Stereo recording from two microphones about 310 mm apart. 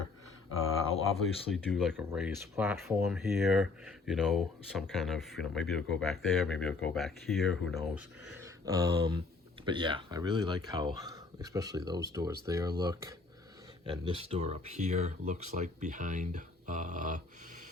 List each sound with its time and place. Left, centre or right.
1.2 s speech: centre
8.6 s speech: centre